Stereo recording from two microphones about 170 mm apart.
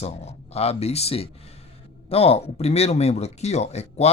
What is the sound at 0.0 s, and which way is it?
Speech, 40° left (ahead or behind).